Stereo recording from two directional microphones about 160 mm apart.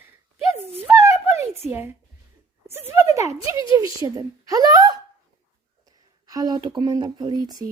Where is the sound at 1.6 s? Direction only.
15° right (ahead or behind).